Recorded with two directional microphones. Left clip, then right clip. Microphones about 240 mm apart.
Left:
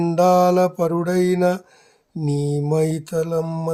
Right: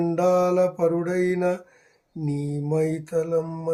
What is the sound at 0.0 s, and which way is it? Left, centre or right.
Mantra, left.